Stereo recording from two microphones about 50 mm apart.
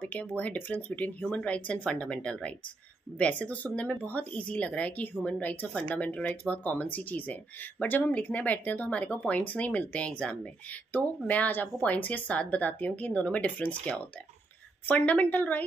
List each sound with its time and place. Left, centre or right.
0.0 s speech: left
10.9 s speech: left
15.0 s speech: left